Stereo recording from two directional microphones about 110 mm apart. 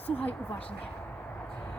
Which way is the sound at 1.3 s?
15° left (ahead or behind).